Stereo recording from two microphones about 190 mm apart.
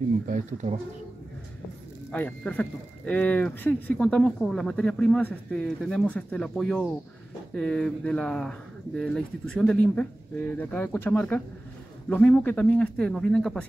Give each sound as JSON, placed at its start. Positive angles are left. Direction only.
{"t": 0.3, "sound": "speech", "side_deg": -40}
{"t": 2.0, "sound": "speech", "side_deg": 5}